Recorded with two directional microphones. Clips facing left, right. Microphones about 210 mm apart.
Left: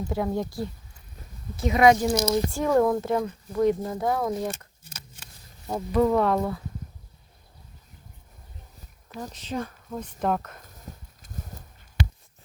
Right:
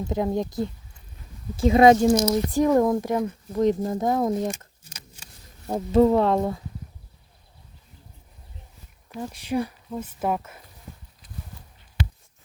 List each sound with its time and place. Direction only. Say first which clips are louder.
0.1 s speech: right 3 dB; 20° right (ahead or behind)
5.6 s speech: right 4 dB; 30° right (ahead or behind)
9.3 s speech: right 6 dB; 10° right (ahead or behind)
11.2 s clip-clop: left 2 dB; 45° left (ahead or behind)